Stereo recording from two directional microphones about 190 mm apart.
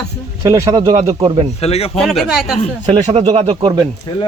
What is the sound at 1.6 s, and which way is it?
Speech, 30° left (ahead or behind).